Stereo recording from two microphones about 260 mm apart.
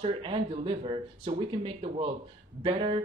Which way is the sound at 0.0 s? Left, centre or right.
Centre.